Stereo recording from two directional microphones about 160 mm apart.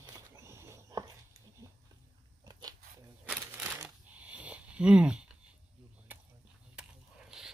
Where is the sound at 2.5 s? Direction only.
25° right (ahead or behind).